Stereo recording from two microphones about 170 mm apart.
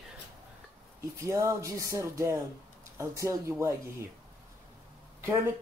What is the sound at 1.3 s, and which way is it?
Speech, 15° right (ahead or behind).